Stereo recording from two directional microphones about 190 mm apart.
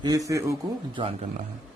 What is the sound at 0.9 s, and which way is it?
Speech, 30° right (ahead or behind).